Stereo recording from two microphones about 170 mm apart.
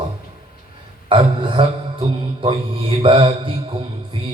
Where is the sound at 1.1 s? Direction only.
30° right (ahead or behind).